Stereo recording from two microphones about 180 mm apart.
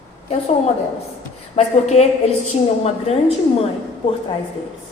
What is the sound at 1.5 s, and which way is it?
Speech, 40° left (ahead or behind).